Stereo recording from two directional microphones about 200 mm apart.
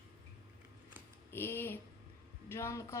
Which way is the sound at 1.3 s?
10° left (ahead or behind).